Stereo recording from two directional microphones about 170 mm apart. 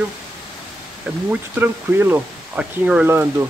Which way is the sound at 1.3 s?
10° right (ahead or behind).